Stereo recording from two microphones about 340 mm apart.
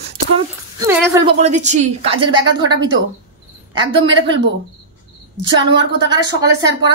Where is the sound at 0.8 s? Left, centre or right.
Centre.